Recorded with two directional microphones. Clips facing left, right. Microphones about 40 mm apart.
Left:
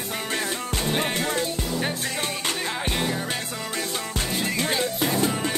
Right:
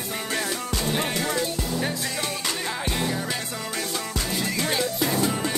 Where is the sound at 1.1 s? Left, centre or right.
Left.